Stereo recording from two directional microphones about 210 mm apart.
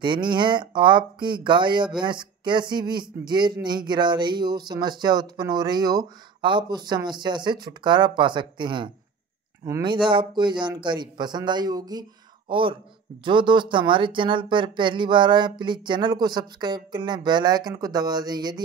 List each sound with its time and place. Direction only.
0.0 s speech: 20° right (ahead or behind)